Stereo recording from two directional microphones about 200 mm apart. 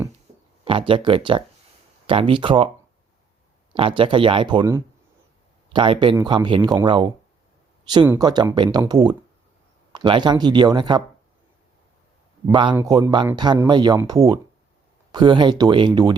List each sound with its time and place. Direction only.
0.3 s a sound: 35° right (ahead or behind)
0.6 s speech: 25° right (ahead or behind)
3.7 s speech: 25° right (ahead or behind)
9.9 s speech: 25° right (ahead or behind)
12.5 s speech: 25° right (ahead or behind)